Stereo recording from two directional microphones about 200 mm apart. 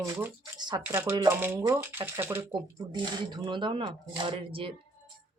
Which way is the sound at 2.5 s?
20° right (ahead or behind).